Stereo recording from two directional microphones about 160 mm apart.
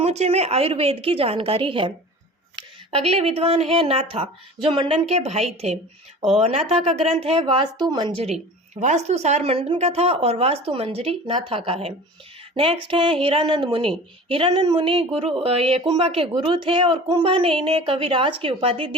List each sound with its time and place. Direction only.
0.0 s a woman's voice: 40° right (ahead or behind)